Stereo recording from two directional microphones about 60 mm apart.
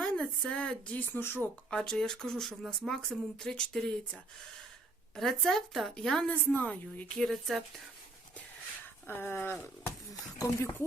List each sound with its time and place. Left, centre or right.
0.0 s speech: centre
0.9 s speech: left
1.7 s speech: centre
6.2 s a woman's voice: left
7.1 s speech: centre
9.0 s speech: left
10.4 s speech: left